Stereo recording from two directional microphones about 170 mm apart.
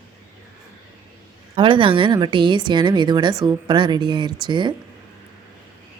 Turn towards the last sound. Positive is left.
turn(degrees=-25)  # may be behind; listen again after turning